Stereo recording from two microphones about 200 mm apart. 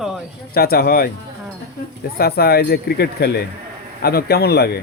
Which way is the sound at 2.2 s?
50° left (ahead or behind).